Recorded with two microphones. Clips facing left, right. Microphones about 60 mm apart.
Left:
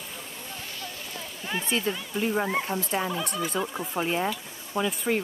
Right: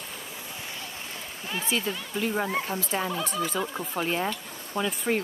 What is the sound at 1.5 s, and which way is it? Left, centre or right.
Speech, centre.